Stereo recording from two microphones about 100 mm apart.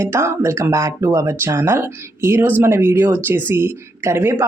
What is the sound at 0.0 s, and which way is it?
Speech, 25° right (ahead or behind).